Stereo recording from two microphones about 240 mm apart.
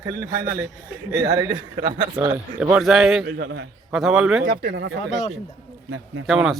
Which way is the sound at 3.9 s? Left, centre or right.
Centre.